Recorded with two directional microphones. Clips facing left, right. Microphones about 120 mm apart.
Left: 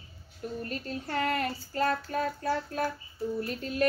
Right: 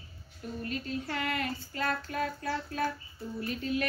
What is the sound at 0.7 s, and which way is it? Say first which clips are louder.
Child singing: even; 40° left (ahead or behind).